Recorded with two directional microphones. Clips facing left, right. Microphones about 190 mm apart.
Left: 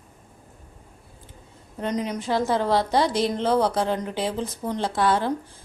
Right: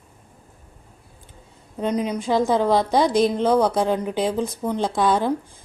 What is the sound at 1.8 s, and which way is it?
A woman's voice, 10° right (ahead or behind).